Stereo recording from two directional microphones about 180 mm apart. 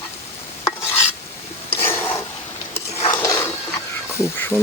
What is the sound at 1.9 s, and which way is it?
Filing, 10° left (ahead or behind).